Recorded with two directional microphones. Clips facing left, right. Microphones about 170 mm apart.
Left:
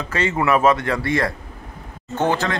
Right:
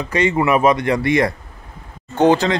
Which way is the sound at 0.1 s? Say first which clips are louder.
Right 3 dB; 15° right (ahead or behind).